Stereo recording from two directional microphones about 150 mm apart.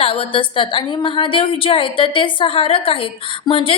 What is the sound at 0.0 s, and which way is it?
A woman's voice, 40° left (ahead or behind).